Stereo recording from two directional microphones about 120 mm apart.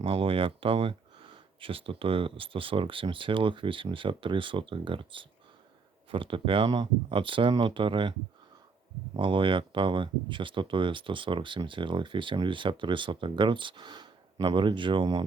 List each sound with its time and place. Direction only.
0.0 s speech: 50° right (ahead or behind)
9.1 s speech: 45° right (ahead or behind)